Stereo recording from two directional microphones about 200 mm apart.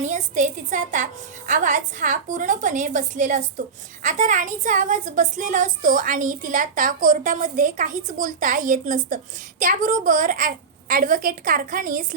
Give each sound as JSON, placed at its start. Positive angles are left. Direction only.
{"t": 0.0, "sound": "a woman's voice", "side_deg": -35}